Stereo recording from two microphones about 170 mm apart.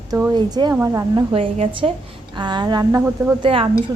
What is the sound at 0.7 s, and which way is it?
Speech, 15° right (ahead or behind).